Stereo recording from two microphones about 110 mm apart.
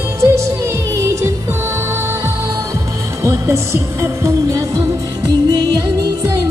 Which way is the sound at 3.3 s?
25° right (ahead or behind).